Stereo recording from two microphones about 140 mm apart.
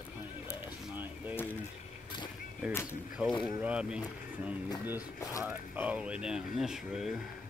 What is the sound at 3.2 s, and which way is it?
Speech, 10° right (ahead or behind).